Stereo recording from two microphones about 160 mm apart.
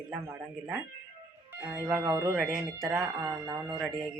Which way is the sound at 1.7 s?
15° right (ahead or behind).